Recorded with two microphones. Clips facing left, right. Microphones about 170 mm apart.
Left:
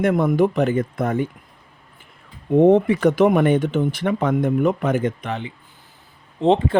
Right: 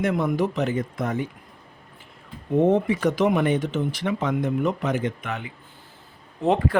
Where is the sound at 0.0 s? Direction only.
50° left (ahead or behind).